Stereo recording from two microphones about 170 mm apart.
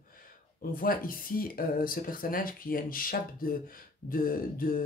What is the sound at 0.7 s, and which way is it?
Speech, 55° left (ahead or behind).